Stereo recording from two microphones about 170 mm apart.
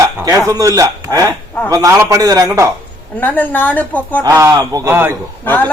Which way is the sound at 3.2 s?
10° left (ahead or behind).